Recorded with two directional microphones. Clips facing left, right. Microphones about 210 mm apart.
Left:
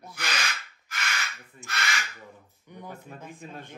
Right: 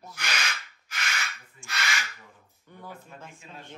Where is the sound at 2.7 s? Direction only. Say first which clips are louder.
Left 3 dB; 15° left (ahead or behind).